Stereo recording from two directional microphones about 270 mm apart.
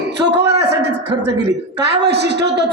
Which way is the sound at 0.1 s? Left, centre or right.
Right.